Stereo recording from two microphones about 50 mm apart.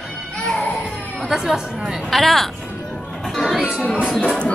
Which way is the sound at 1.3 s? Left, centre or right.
Centre.